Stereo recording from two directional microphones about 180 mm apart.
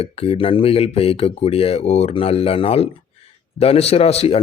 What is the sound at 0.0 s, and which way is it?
Speech, 30° left (ahead or behind).